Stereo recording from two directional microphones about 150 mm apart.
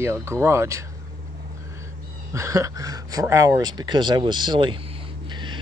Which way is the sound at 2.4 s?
20° right (ahead or behind).